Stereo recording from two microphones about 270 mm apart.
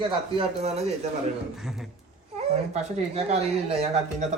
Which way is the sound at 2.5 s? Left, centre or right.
Right.